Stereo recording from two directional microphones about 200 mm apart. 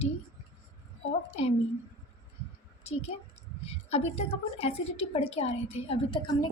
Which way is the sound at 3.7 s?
30° left (ahead or behind).